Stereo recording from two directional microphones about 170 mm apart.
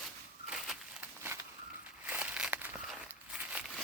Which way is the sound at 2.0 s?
5° right (ahead or behind).